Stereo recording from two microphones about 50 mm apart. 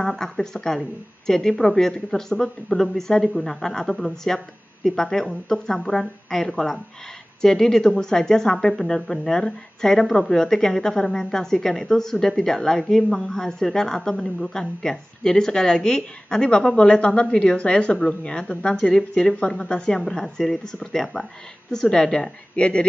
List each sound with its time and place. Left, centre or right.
0.0 s speech: centre